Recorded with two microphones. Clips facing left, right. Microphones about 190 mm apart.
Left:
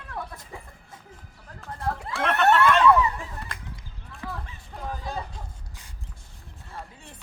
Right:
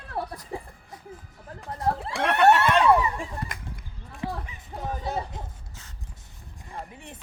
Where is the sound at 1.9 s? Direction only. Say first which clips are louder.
Right 4 dB; 30° right (ahead or behind).